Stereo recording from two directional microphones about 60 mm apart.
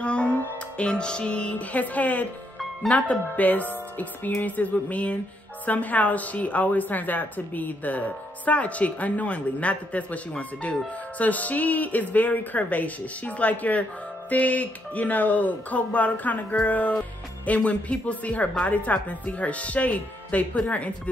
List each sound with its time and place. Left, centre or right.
0.0 s music: centre
2.9 s a woman's voice: left